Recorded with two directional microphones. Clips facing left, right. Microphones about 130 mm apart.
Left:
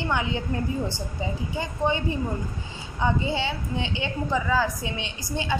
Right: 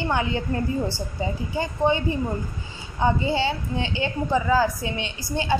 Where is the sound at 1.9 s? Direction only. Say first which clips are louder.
Right 2 dB; 30° right (ahead or behind).